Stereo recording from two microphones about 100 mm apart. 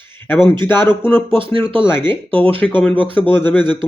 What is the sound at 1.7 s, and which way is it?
Speech, 20° left (ahead or behind).